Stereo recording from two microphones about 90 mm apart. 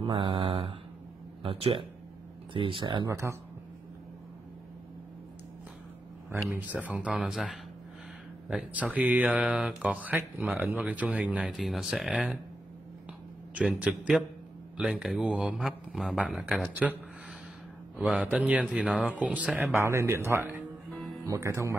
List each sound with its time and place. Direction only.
0.0 s mantra: 70° right (ahead or behind)
1.4 s speech: 85° right; by 3.1 s 65° right (ahead or behind)
3.1 s speech: 30° right (ahead or behind)
6.5 s mantra: 15° right (ahead or behind)
7.2 s speech: 5° right (ahead or behind)
8.5 s mantra: 10° right (ahead or behind)
11.4 s speech: centre (ahead or behind)
13.7 s mantra: 15° right (ahead or behind)
14.8 s speech: 5° right (ahead or behind)
16.8 s mantra: 10° right (ahead or behind)
19.8 s speech: 30° right (ahead or behind)